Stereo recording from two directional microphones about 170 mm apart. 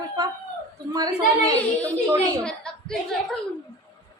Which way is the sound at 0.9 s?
20° right (ahead or behind).